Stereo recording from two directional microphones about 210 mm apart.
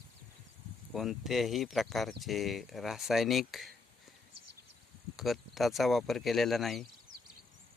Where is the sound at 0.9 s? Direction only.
Centre (ahead or behind).